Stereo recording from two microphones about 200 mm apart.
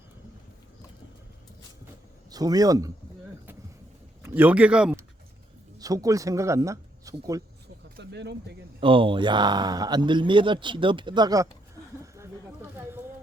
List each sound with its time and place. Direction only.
2.3 s a man's voice: 20° right (ahead or behind)
4.2 s speech: 10° right (ahead or behind)
5.8 s speech: 15° right (ahead or behind)
7.9 s speech: 60° right (ahead or behind)
8.8 s a man's voice: 25° right (ahead or behind)